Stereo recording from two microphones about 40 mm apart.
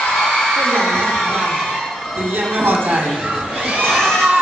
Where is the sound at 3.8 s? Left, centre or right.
Centre.